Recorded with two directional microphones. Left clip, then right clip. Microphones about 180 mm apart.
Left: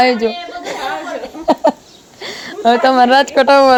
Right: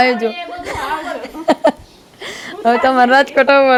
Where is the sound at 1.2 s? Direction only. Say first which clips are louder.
Left 1 dB; 5° left (ahead or behind).